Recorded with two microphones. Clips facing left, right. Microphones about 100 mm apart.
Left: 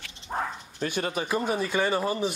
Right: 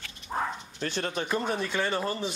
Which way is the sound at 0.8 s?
10° left (ahead or behind).